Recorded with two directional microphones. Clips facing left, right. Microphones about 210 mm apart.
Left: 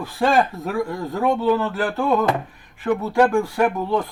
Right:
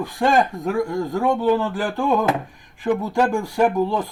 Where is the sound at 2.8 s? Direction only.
5° left (ahead or behind).